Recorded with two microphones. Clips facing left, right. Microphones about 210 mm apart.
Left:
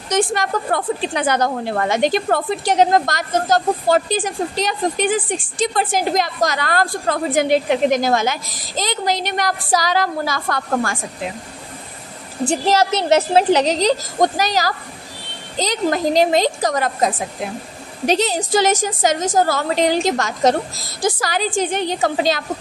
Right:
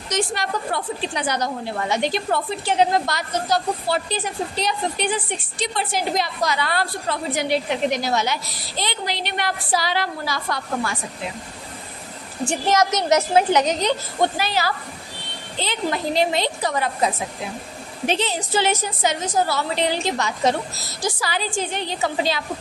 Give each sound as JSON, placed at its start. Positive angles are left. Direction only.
{"t": 0.1, "sound": "a woman's voice", "side_deg": 50}
{"t": 12.4, "sound": "a woman's voice", "side_deg": 35}